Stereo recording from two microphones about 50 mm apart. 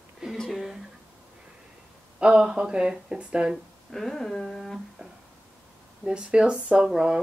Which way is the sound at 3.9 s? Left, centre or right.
Centre.